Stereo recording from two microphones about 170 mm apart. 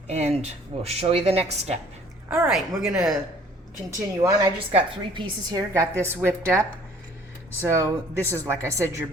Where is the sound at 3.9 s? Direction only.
20° right (ahead or behind).